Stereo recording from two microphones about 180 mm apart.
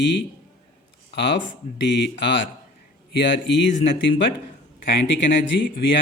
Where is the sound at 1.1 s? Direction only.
75° left (ahead or behind).